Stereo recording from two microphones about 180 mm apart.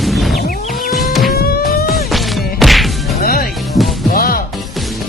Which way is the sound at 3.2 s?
55° left (ahead or behind).